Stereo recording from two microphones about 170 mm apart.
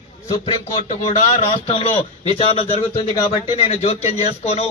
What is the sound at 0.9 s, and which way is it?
A man's voice, 40° left (ahead or behind).